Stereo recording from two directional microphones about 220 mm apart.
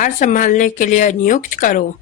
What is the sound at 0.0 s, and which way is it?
A man's voice, 35° left (ahead or behind).